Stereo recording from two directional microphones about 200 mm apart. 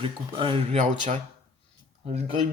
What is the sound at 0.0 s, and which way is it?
Speech, 25° right (ahead or behind).